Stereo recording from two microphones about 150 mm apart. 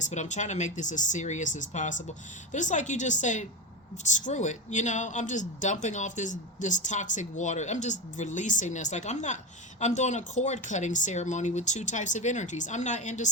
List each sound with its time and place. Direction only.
0.0 s speech: 50° left (ahead or behind)